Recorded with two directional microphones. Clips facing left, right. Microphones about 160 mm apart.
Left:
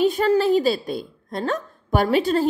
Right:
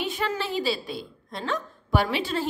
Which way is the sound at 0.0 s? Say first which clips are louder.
Left 11 dB; 40° left (ahead or behind).